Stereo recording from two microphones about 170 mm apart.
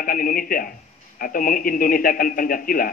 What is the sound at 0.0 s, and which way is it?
Speech, 55° left (ahead or behind).